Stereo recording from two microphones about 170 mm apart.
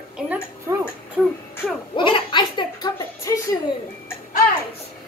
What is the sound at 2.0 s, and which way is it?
A woman's voice, 30° left (ahead or behind).